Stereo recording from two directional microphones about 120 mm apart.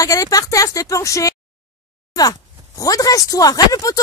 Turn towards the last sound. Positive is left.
turn(degrees=30)  # may be behind; listen again after turning